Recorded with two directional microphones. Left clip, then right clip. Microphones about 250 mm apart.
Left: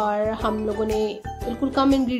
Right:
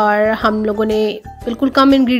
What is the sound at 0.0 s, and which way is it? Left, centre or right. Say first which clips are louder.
A woman's voice: right 10 dB; right.